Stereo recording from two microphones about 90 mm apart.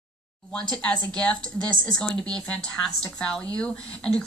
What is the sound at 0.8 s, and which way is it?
A woman's voice, 10° left (ahead or behind).